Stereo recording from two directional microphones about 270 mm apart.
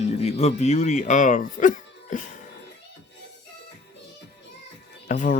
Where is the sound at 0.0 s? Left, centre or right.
Left.